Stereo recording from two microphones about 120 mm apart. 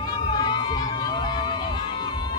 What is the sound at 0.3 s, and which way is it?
Run, 40° left (ahead or behind).